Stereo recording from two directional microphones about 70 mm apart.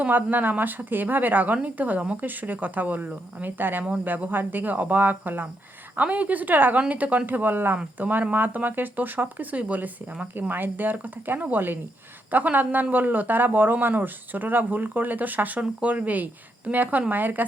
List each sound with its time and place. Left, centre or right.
0.0 s speech: right